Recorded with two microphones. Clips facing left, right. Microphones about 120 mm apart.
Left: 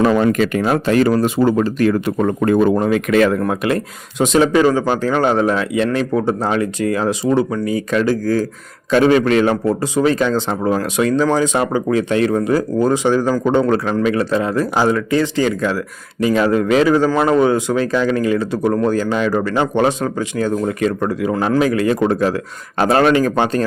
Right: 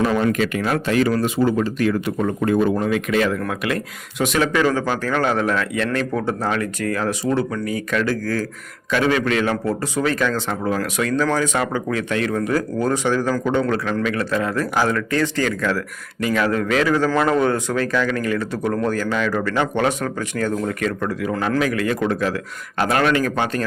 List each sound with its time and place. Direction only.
0.3 s speech: 40° left (ahead or behind)
3.4 s speech: 30° left (ahead or behind)
8.9 s speech: 35° left (ahead or behind)
9.6 s speech: 20° left (ahead or behind)